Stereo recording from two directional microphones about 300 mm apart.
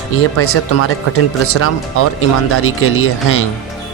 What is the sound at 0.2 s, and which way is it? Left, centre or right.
Speech, left.